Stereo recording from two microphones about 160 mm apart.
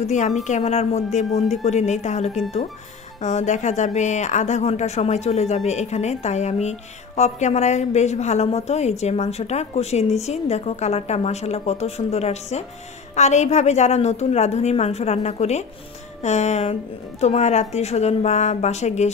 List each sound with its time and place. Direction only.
0.0 s a woman's voice: 45° left (ahead or behind)